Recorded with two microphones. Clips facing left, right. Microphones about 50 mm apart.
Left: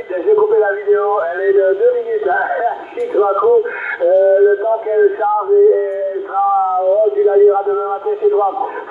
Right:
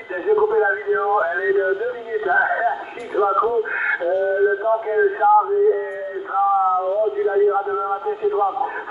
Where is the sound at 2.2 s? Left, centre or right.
Centre.